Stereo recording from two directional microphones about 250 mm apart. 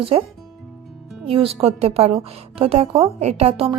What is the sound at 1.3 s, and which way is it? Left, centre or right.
A woman's voice, right.